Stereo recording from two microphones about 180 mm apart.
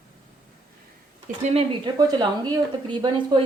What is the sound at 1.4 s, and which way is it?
Speech, 35° right (ahead or behind).